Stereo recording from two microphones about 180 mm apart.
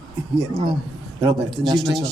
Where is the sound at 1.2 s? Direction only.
25° right (ahead or behind).